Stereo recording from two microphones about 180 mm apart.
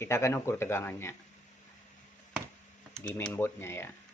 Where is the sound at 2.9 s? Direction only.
5° left (ahead or behind).